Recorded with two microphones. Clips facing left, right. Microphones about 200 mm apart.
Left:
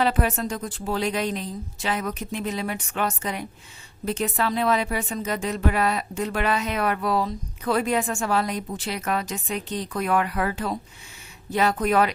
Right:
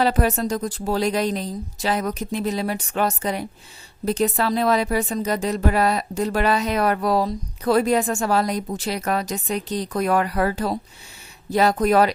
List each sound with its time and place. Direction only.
0.0 s a woman's voice: 40° right (ahead or behind)